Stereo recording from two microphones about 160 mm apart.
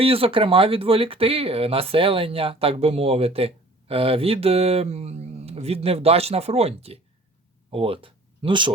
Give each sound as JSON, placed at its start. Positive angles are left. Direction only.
{"t": 0.0, "sound": "speech", "side_deg": -35}